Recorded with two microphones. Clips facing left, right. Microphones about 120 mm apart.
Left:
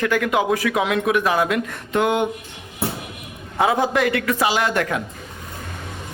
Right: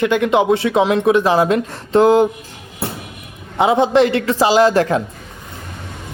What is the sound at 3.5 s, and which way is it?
Speech, 20° right (ahead or behind).